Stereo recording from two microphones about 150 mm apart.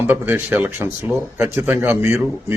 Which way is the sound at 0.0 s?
10° right (ahead or behind).